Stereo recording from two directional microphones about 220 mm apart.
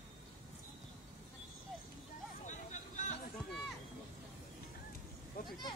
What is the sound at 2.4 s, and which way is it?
Vehicle, 35° left (ahead or behind).